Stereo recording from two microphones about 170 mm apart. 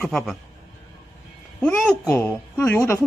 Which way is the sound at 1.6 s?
10° left (ahead or behind).